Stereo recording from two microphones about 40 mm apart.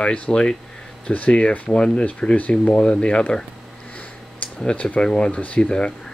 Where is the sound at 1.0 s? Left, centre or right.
Left.